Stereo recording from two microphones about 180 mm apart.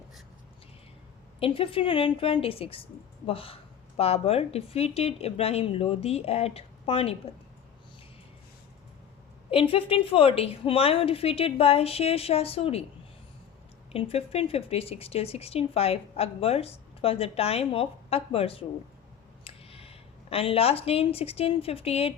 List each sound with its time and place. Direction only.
1.4 s speech: 30° left (ahead or behind)
9.5 s speech: 30° left (ahead or behind)
13.9 s speech: 30° left (ahead or behind)